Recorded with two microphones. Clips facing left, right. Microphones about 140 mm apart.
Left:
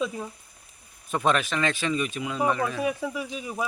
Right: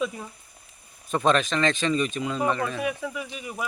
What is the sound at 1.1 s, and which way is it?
Speech, 10° left (ahead or behind).